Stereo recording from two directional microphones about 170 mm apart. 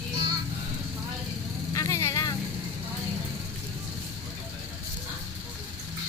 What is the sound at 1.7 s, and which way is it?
Vehicle, 20° left (ahead or behind).